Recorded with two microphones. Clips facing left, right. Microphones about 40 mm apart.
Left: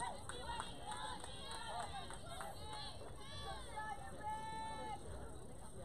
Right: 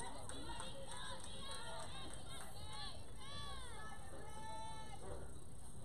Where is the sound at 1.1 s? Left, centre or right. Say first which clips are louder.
Left 2 dB; centre.